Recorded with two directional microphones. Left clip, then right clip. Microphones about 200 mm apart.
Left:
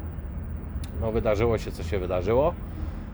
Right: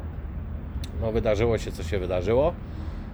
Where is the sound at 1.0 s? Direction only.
Centre (ahead or behind).